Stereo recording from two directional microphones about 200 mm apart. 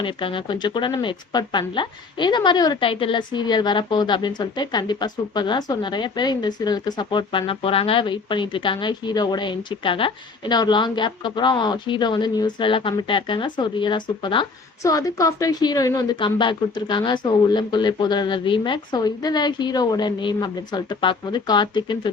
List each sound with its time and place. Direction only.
0.0 s speech: 25° left (ahead or behind)